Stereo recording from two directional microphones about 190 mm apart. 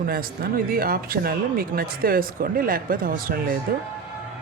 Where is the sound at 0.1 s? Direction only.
50° right (ahead or behind).